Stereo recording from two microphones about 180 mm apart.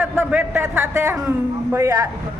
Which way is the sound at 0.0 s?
10° right (ahead or behind).